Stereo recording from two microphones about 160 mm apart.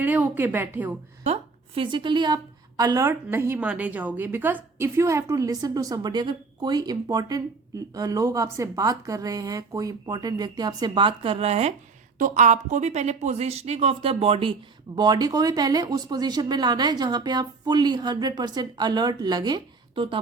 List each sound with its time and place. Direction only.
0.0 s a woman's voice: 10° right (ahead or behind)
1.2 s a woman's voice: 40° right (ahead or behind)